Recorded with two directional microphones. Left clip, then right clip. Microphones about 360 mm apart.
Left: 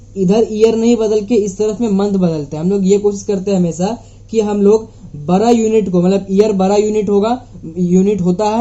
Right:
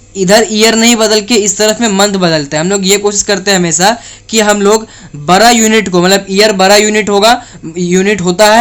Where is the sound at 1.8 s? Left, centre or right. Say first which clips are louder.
Right 7 dB; right.